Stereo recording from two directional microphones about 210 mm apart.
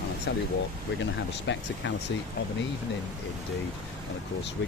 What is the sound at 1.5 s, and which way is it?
Speech, 60° left (ahead or behind).